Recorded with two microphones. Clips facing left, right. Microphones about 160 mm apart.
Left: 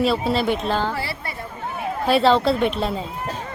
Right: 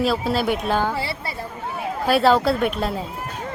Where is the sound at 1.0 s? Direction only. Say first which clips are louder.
Right 1 dB; 30° right (ahead or behind).